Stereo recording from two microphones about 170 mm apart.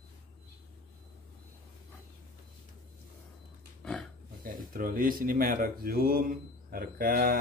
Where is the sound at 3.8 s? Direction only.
5° left (ahead or behind).